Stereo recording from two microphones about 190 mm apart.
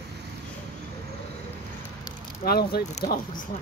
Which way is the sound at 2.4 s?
55° left (ahead or behind).